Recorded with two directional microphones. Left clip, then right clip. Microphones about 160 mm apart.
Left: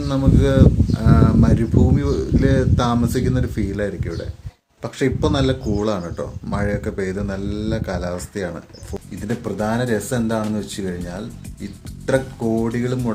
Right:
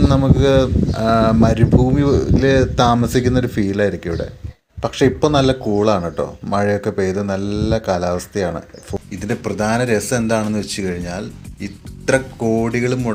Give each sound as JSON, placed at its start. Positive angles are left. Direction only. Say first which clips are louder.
{"t": 0.1, "sound": "speech", "louder": "right 4 dB", "side_deg": -20}
{"t": 8.9, "sound": "a sound", "louder": "right 6 dB", "side_deg": -10}
{"t": 9.3, "sound": "speech", "louder": "right 4 dB", "side_deg": -10}